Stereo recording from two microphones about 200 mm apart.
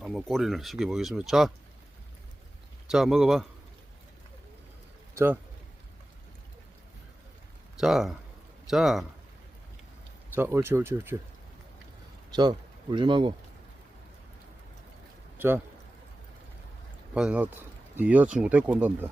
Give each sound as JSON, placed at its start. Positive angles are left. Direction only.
{"t": 0.0, "sound": "speech", "side_deg": 0}
{"t": 2.9, "sound": "speech", "side_deg": 0}
{"t": 5.1, "sound": "a man's voice", "side_deg": -10}
{"t": 7.8, "sound": "speech", "side_deg": 0}
{"t": 10.3, "sound": "speech", "side_deg": -10}
{"t": 12.3, "sound": "speech", "side_deg": -20}
{"t": 15.4, "sound": "speech", "side_deg": -10}
{"t": 17.2, "sound": "speech", "side_deg": -5}